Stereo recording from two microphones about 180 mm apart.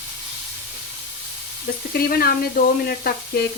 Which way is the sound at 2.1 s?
60° left (ahead or behind).